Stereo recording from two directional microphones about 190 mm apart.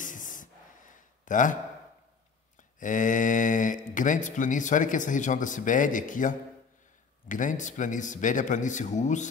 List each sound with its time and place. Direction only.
0.0 s a sound: 45° left (ahead or behind)
1.2 s a man's voice: 45° left (ahead or behind)
2.8 s a man's voice: 40° left (ahead or behind)